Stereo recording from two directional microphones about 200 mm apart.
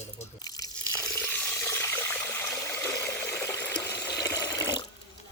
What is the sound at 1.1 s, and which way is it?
Water, 10° left (ahead or behind).